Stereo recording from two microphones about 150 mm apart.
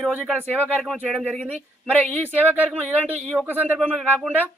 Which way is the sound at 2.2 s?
10° right (ahead or behind).